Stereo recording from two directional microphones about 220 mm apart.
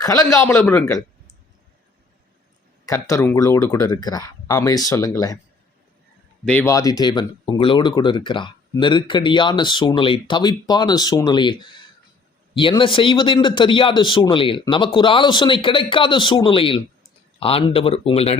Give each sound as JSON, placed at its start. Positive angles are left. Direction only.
{"t": 0.0, "sound": "speech", "side_deg": 15}
{"t": 2.8, "sound": "speech", "side_deg": 15}
{"t": 6.4, "sound": "speech", "side_deg": 5}